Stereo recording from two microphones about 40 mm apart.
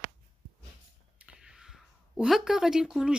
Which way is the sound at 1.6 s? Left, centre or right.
Centre.